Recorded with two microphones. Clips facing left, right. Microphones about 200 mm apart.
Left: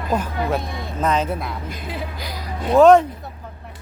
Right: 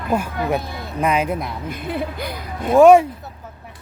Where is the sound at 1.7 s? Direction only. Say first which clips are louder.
Right 5 dB; 55° right (ahead or behind).